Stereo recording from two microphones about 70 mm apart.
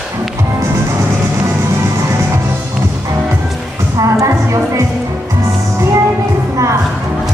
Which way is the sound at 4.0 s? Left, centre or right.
Right.